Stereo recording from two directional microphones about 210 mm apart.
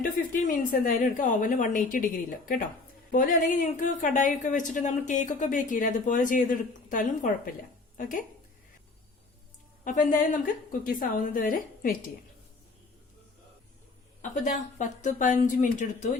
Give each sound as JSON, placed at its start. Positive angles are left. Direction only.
{"t": 0.0, "sound": "a woman's voice", "side_deg": 40}
{"t": 9.8, "sound": "a woman's voice", "side_deg": 40}
{"t": 14.2, "sound": "a woman's voice", "side_deg": 35}